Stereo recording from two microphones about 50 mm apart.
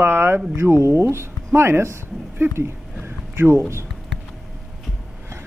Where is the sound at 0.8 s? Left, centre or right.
Right.